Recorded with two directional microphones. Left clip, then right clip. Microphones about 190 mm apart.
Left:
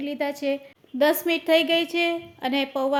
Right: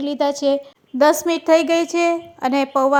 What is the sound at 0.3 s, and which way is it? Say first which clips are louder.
A woman's voice: right 8 dB; 30° right (ahead or behind).